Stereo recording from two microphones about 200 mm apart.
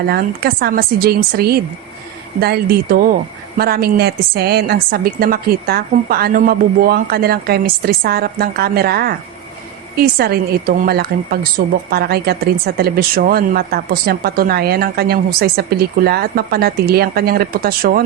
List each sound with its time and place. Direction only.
0.1 s a woman's voice: 50° right (ahead or behind)